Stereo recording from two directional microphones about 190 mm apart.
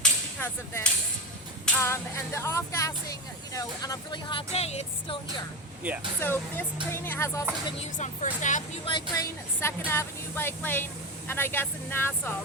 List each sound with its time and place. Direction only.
0.0 s a sound: 10° left (ahead or behind)
1.6 s speech: 10° left (ahead or behind); by 5.1 s 35° left (ahead or behind)
6.1 s speech: 10° left (ahead or behind)
7.8 s speech: 40° left (ahead or behind)
8.9 s speech: 20° left (ahead or behind)